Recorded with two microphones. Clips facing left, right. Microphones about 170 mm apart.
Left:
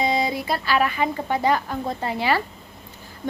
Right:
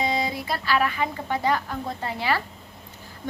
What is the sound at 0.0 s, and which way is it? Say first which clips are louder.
A woman's voice: left 3 dB; 15° left (ahead or behind).